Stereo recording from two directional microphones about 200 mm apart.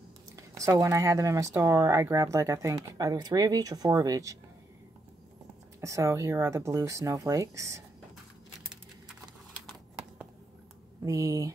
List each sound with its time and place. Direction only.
0.4 s speech: 15° right (ahead or behind)
5.8 s speech: 15° right (ahead or behind)
11.1 s speech: 15° right (ahead or behind)